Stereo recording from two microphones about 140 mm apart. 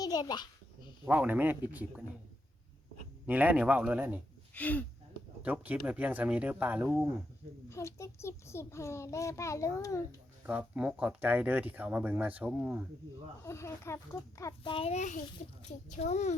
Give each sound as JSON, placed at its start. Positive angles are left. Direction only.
{"t": 0.0, "sound": "babbling", "side_deg": 30}
{"t": 1.0, "sound": "speech", "side_deg": -10}
{"t": 3.2, "sound": "speech", "side_deg": -10}
{"t": 4.5, "sound": "speech", "side_deg": 10}
{"t": 5.4, "sound": "speech", "side_deg": -10}
{"t": 7.7, "sound": "a child's voice", "side_deg": 20}
{"t": 10.4, "sound": "speech", "side_deg": -10}
{"t": 13.4, "sound": "a child's voice", "side_deg": 20}
{"t": 14.6, "sound": "a child's voice", "side_deg": 40}